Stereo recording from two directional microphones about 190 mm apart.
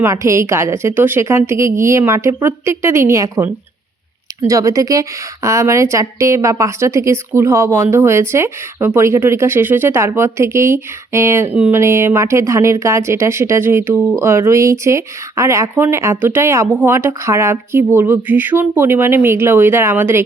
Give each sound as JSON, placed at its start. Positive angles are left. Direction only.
{"t": 0.0, "sound": "a woman's voice", "side_deg": -15}